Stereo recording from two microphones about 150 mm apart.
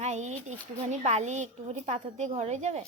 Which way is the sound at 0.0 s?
50° right (ahead or behind).